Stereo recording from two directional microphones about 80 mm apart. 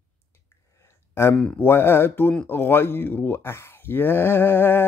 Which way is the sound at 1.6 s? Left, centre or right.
Left.